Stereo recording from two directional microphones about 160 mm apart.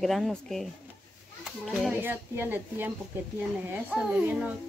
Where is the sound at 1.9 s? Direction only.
10° right (ahead or behind).